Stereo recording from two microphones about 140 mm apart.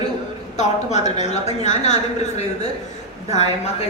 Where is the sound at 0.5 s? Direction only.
55° left (ahead or behind).